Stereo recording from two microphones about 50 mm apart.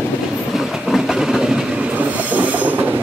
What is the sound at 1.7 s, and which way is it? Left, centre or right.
Train, right.